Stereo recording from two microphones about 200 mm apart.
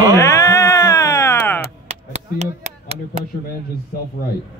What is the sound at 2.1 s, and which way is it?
Speech, 35° right (ahead or behind).